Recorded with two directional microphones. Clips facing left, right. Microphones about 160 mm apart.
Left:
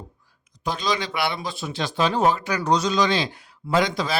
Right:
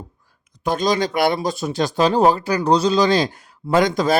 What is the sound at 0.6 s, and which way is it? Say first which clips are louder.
Speech: right 7 dB; 50° right (ahead or behind).